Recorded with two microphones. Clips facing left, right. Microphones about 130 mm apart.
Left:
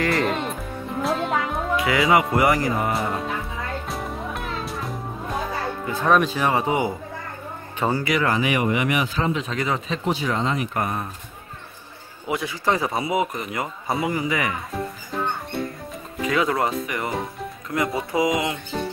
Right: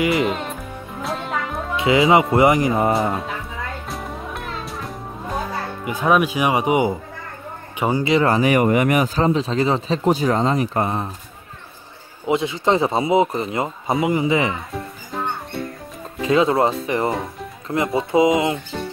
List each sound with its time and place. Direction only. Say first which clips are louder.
0.0 s music: right 3 dB; 5° right (ahead or behind)
1.8 s a man's voice: right 5 dB; 25° right (ahead or behind)
3.8 s music: even; centre (ahead or behind)
5.9 s speech: right 2 dB; 10° right (ahead or behind)
8.0 s speech: right 9 dB; 30° right (ahead or behind)
10.0 s speech: right 6 dB; 40° right (ahead or behind); by 11.1 s 25° right (ahead or behind)
12.3 s a man's voice: right 5 dB; 25° right (ahead or behind)
16.3 s a man's voice: right 5 dB; 25° right (ahead or behind)